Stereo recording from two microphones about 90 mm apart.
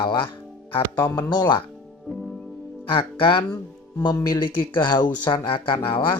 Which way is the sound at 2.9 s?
70° left (ahead or behind).